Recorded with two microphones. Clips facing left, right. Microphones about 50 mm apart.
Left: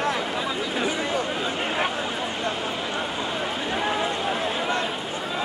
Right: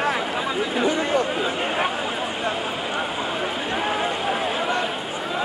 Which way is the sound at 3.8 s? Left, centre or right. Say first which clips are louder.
Right 2 dB; centre.